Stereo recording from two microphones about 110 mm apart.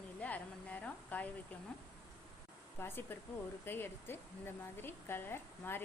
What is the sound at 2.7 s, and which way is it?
A woman's voice, 20° left (ahead or behind).